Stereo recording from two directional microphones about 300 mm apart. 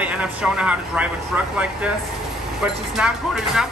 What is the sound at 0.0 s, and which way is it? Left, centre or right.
Speech, centre.